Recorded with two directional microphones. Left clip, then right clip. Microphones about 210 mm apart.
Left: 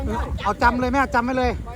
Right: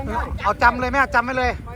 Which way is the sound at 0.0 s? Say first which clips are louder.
Right 2 dB; 5° left (ahead or behind).